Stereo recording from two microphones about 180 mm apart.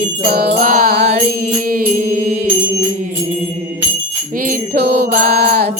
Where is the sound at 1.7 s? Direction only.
50° right (ahead or behind).